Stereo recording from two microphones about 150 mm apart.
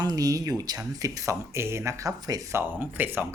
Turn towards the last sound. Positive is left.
turn(degrees=-15)  # may be behind; listen again after turning